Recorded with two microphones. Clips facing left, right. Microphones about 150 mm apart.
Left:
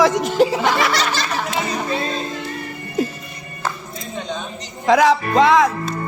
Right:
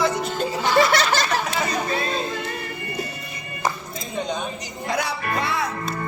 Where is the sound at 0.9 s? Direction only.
55° right (ahead or behind).